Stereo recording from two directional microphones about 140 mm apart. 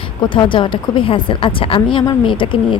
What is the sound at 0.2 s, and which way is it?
Speech, 35° left (ahead or behind).